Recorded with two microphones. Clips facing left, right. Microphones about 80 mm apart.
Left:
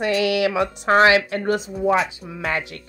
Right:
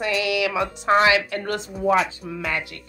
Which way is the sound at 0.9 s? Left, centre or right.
Left.